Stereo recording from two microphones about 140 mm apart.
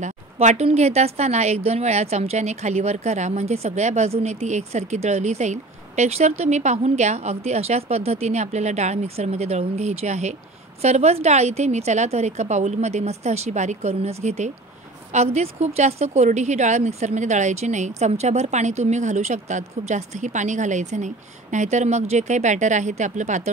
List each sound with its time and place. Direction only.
0.0 s speech: 55° right (ahead or behind)